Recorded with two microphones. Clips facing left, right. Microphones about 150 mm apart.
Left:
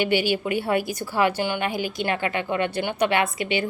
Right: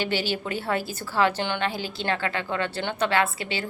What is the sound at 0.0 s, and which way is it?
A woman's voice, 15° left (ahead or behind).